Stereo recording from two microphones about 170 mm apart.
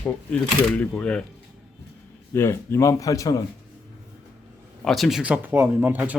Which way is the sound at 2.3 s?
15° left (ahead or behind).